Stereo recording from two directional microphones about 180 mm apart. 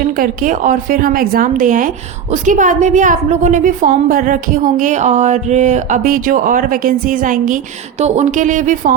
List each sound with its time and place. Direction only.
0.2 s a woman's voice: 45° right (ahead or behind)